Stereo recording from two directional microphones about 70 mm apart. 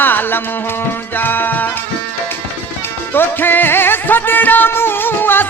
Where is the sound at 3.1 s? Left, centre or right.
Left.